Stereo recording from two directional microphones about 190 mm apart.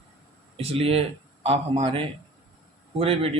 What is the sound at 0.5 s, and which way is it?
A man's voice, 30° right (ahead or behind).